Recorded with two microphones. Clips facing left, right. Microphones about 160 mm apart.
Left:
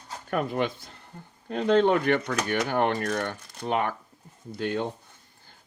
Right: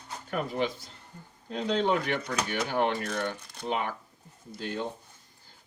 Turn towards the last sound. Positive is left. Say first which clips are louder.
# left 6 dB
turn(degrees=60)  # may be behind; listen again after turning